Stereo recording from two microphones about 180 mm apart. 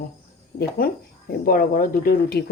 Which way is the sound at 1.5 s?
55° left (ahead or behind).